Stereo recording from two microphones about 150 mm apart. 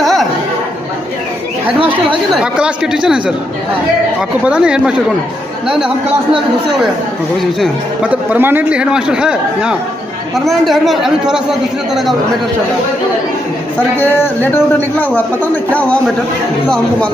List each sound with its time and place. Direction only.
0.0 s chatter: centre (ahead or behind)
1.8 s speech: 35° right (ahead or behind)
2.3 s speech: 5° right (ahead or behind)
4.5 s speech: 5° right (ahead or behind)
7.6 s a man's voice: 10° right (ahead or behind)
13.7 s speech: 15° left (ahead or behind)
15.7 s speech: 10° left (ahead or behind)